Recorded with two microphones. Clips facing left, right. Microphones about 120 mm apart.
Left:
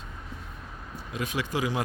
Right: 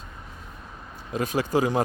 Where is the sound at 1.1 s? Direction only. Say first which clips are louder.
Right 7 dB; 40° right (ahead or behind).